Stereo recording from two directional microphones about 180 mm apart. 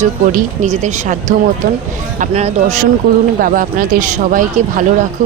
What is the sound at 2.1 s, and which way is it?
Speech, 40° right (ahead or behind).